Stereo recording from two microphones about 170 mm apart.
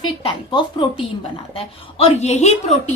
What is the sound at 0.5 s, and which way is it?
A woman's voice, 30° left (ahead or behind).